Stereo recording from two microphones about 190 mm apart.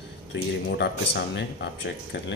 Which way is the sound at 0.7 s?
65° left (ahead or behind).